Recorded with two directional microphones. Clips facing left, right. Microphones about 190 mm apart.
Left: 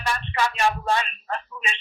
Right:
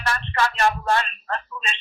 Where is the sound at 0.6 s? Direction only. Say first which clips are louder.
Right 2 dB; 15° left (ahead or behind).